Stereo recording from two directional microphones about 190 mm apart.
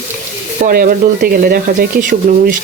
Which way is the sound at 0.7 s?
50° right (ahead or behind).